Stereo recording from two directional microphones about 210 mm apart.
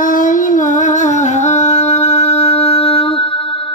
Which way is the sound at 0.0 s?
40° left (ahead or behind).